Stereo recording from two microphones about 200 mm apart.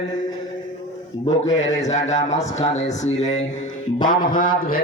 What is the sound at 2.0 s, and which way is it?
A man's voice, 35° left (ahead or behind).